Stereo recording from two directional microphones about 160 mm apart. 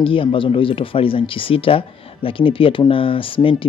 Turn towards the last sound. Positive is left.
turn(degrees=35)  # may be behind; listen again after turning